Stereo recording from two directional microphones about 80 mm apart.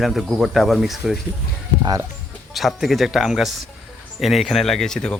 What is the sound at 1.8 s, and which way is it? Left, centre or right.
Speech, right.